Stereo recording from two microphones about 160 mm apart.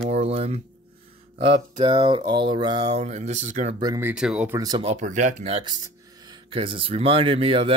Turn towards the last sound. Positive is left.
turn(degrees=-35)  # may be behind; listen again after turning